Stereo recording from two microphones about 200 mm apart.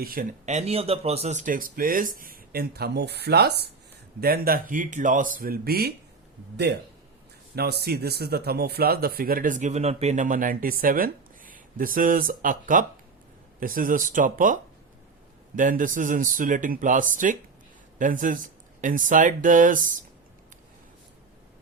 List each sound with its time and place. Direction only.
0.0 s speech: 45° right (ahead or behind)
7.5 s speech: 50° right (ahead or behind)